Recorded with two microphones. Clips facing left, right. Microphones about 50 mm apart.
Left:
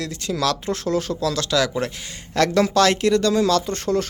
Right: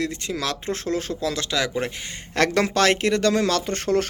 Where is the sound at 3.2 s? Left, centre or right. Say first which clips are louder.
Left 2 dB; right.